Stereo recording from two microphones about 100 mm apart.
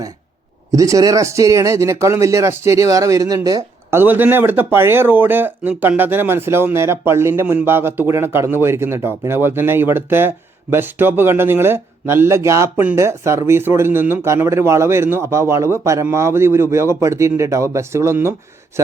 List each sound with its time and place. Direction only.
0.7 s speech: 35° right (ahead or behind)
3.9 s a man's voice: 20° right (ahead or behind)